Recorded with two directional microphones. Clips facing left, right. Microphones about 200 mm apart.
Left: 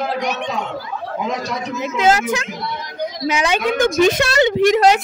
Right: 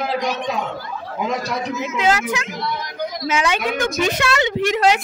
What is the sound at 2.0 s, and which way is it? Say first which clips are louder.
Speech: left 4 dB; 40° left (ahead or behind).